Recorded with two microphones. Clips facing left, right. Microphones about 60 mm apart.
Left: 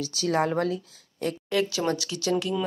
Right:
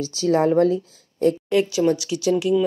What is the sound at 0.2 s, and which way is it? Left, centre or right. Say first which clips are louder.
Speech: right 6 dB; left.